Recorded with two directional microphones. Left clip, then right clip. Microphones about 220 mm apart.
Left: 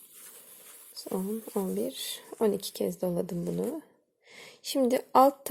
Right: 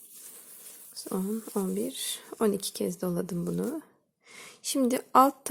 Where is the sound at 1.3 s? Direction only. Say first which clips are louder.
Even; 20° right (ahead or behind).